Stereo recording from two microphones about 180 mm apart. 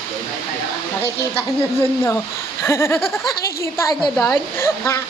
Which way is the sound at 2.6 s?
15° left (ahead or behind).